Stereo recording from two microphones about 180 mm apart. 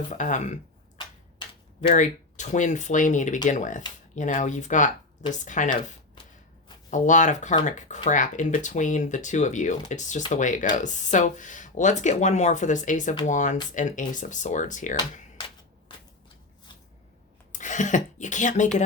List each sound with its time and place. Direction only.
0.1 s speech: 45° left (ahead or behind)
1.9 s speech: 45° left (ahead or behind)
6.9 s speech: 45° left (ahead or behind)
17.5 s speech: 45° left (ahead or behind)